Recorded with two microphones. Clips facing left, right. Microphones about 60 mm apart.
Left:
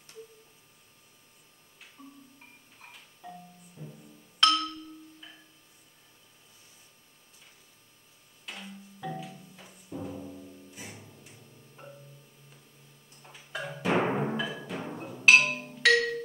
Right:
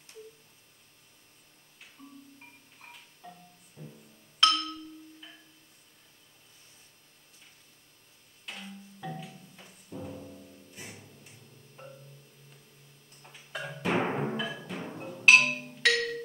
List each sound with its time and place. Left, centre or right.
3.2 s music: centre
8.5 s music: centre
13.1 s music: centre